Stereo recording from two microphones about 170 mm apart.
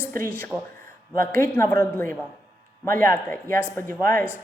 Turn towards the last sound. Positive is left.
turn(degrees=10)  # may be behind; listen again after turning